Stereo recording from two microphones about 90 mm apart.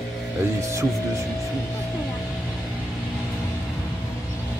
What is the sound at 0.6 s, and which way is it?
Music, 35° right (ahead or behind).